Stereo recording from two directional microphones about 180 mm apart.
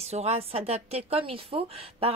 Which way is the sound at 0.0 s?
35° right (ahead or behind).